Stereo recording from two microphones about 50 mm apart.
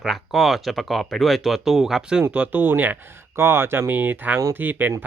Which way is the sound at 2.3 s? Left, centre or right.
Right.